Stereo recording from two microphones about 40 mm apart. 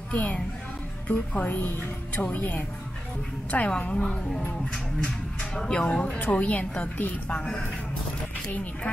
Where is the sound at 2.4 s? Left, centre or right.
Left.